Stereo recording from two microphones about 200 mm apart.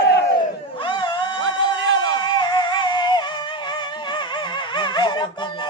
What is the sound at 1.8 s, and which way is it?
Music, 65° right (ahead or behind).